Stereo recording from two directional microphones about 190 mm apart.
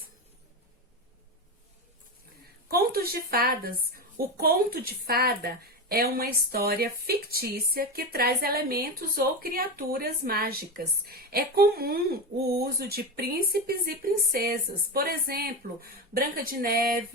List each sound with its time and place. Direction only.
2.6 s a woman's voice: 55° right (ahead or behind)